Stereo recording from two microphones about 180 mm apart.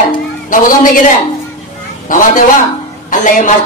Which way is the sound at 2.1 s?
50° left (ahead or behind).